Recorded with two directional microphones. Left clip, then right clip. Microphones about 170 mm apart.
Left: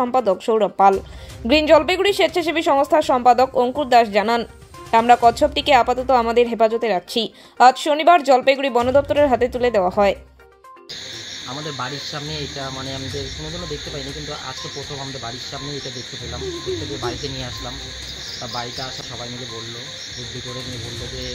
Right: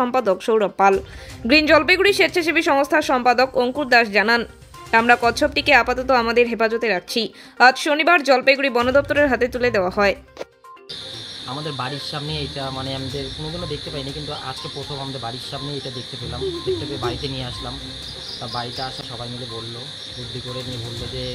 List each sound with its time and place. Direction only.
0.0 s speech: 5° left (ahead or behind)
12.3 s speech: 10° right (ahead or behind)
18.5 s speech: 5° right (ahead or behind)